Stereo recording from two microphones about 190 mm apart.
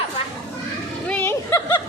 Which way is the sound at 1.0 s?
10° left (ahead or behind).